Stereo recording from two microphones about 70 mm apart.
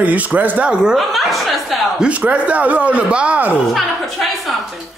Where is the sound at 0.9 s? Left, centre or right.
Centre.